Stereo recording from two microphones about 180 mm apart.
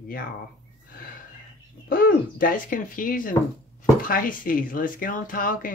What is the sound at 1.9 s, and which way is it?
Speech, 50° left (ahead or behind).